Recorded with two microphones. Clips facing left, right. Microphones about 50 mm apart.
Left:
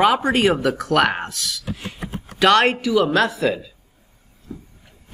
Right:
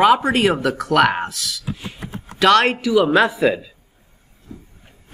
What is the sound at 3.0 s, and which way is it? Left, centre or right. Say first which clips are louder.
Speech: right 3 dB; centre.